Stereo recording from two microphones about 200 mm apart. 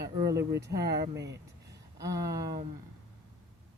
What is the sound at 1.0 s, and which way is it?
Speech, 60° right (ahead or behind).